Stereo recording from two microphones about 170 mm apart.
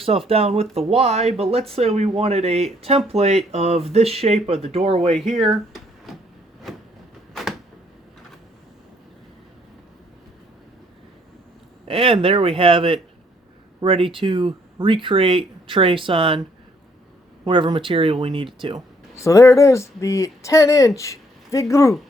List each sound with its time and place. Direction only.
0.0 s speech: 35° right (ahead or behind)
5.2 s speech: centre (ahead or behind)
11.9 s speech: 30° right (ahead or behind)
19.1 s speech: 20° left (ahead or behind)